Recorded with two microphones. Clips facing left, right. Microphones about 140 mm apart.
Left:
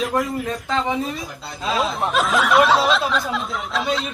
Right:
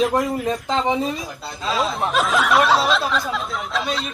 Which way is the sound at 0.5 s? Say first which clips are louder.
Right 2 dB; 20° right (ahead or behind).